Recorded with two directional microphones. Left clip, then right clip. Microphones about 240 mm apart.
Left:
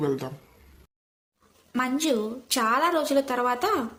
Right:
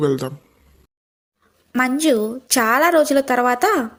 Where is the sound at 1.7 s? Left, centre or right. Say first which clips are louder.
Right 8 dB; right.